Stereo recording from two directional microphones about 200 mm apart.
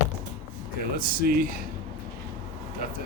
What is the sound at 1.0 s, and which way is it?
Speech, 45° right (ahead or behind).